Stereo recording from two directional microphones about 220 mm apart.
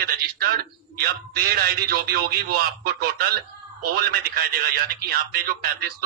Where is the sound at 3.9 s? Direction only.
45° right (ahead or behind).